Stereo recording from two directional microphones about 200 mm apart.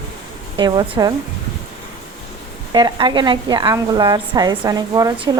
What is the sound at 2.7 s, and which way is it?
A woman's voice, 20° right (ahead or behind).